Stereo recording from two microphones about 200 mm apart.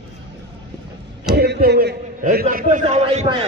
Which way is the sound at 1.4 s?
55° right (ahead or behind).